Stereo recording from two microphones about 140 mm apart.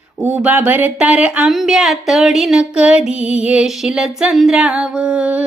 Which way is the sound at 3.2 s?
50° left (ahead or behind).